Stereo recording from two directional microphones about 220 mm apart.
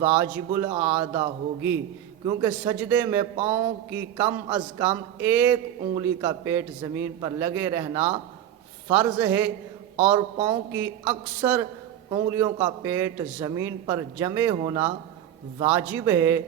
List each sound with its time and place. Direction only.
0.0 s a man's voice: 10° right (ahead or behind)
10.5 s a man's voice: 10° right (ahead or behind)